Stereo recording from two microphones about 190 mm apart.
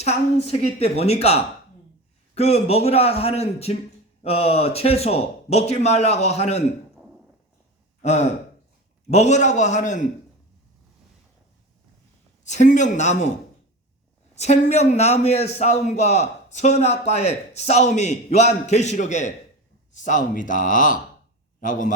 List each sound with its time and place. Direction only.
0.0 s a man's voice: 35° left (ahead or behind)
8.0 s a man's voice: 35° left (ahead or behind)
12.5 s a man's voice: 40° left (ahead or behind)
14.3 s a man's voice: 35° left (ahead or behind)